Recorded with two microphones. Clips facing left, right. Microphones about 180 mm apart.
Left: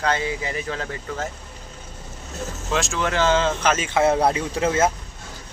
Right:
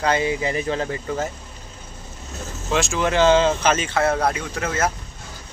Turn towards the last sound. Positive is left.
turn(degrees=25)  # may be behind; listen again after turning